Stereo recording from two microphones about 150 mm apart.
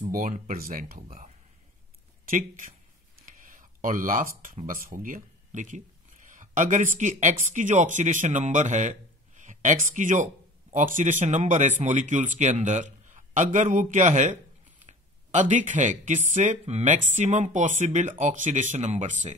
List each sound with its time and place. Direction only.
0.0 s speech: 65° right (ahead or behind)
2.2 s speech: 60° right (ahead or behind)
3.3 s a sound: 60° right (ahead or behind)
4.4 s speech: 65° right (ahead or behind)